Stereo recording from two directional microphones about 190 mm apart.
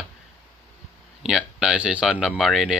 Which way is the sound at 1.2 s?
5° right (ahead or behind).